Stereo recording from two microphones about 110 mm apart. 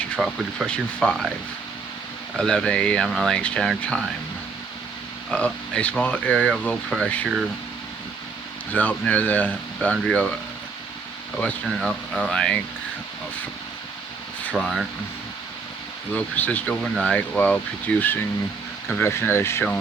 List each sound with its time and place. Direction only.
0.2 s speech: 5° left (ahead or behind)
2.3 s speech: 5° left (ahead or behind)
5.3 s speech: 10° left (ahead or behind)
8.7 s speech: 15° left (ahead or behind)
11.6 s speech: centre (ahead or behind)
14.4 s speech: 10° left (ahead or behind)
16.1 s speech: 15° left (ahead or behind)